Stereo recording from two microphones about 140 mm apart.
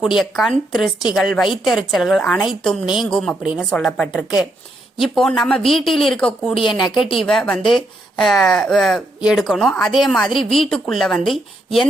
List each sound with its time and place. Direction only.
0.2 s speech: centre (ahead or behind)
6.5 s a woman's voice: 40° left (ahead or behind)
7.2 s speech: 5° left (ahead or behind)